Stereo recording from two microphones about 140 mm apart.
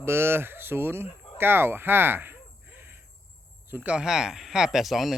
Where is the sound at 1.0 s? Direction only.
45° left (ahead or behind).